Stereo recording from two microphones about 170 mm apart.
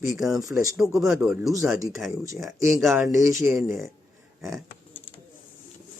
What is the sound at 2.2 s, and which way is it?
Speech, 20° right (ahead or behind).